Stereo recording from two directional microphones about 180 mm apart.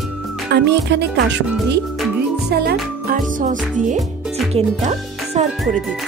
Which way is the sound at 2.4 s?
65° right (ahead or behind).